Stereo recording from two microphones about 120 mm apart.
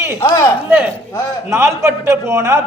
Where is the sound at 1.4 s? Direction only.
25° right (ahead or behind).